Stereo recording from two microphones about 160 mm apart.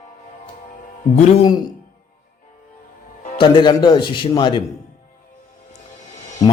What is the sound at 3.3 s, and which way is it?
Speech, 30° left (ahead or behind).